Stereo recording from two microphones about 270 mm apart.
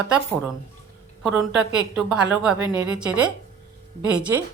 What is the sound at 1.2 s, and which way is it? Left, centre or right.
A woman's voice, centre.